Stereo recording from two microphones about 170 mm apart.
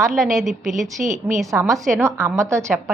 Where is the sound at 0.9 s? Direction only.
50° right (ahead or behind).